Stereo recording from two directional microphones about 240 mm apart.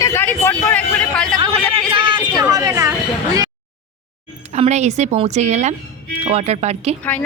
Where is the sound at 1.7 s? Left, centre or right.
Right.